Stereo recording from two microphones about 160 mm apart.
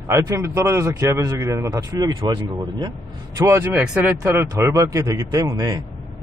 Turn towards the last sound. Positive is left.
turn(degrees=-25)  # may be behind; listen again after turning